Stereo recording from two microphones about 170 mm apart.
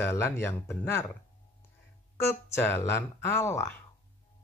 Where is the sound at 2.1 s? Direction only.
15° left (ahead or behind).